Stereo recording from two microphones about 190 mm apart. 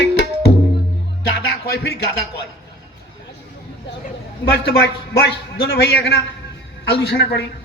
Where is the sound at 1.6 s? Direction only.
55° left (ahead or behind).